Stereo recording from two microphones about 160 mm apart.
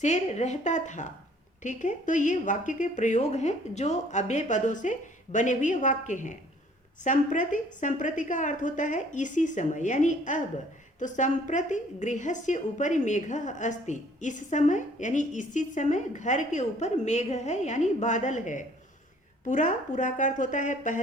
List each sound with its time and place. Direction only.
0.0 s a woman's voice: 45° left (ahead or behind)